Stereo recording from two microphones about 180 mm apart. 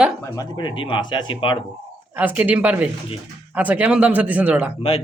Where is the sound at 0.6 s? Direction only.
30° left (ahead or behind).